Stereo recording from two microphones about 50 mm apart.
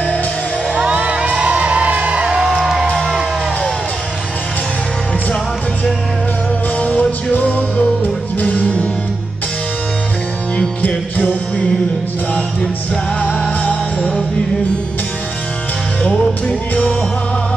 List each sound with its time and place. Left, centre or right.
0.7 s music: right
2.2 s music: centre
6.8 s music: left
11.1 s music: left
13.2 s music: left